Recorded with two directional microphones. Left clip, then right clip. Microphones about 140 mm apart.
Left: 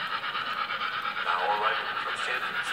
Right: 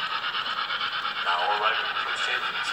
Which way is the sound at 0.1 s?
15° left (ahead or behind).